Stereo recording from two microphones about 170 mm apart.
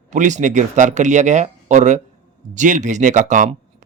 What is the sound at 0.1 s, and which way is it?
Speech, 45° right (ahead or behind).